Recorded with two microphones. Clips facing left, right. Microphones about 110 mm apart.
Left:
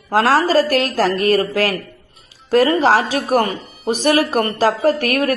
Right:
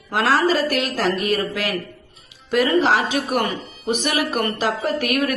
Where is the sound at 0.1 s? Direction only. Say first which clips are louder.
Left 4 dB; 35° left (ahead or behind).